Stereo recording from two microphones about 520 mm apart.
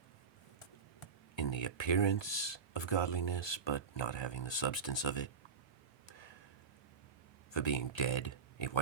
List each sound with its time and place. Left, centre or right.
0.9 s speech: left
6.1 s a sound: left
7.5 s speech: left